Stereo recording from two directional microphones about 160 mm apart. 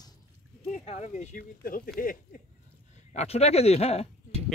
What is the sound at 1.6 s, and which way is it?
Speech, 60° left (ahead or behind).